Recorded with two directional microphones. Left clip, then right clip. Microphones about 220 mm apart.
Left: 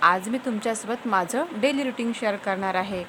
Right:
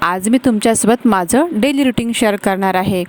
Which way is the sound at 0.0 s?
45° right (ahead or behind).